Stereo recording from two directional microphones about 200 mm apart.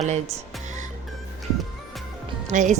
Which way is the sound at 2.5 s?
35° right (ahead or behind).